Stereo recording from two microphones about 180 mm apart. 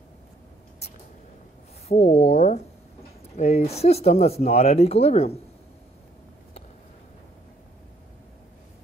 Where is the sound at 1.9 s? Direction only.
35° left (ahead or behind).